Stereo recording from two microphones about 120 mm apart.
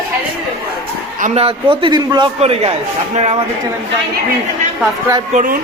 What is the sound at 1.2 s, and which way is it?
A man's voice, 55° right (ahead or behind).